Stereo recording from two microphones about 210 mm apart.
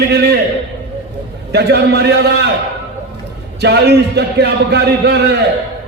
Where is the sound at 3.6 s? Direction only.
50° right (ahead or behind).